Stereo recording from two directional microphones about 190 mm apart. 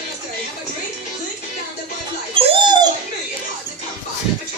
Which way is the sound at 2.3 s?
30° right (ahead or behind).